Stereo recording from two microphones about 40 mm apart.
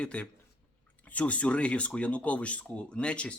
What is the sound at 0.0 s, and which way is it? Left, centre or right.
A man's voice, left.